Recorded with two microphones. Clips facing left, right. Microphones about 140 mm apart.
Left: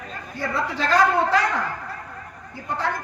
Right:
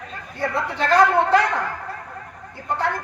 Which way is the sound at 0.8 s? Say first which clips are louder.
Right 3 dB; 55° right (ahead or behind).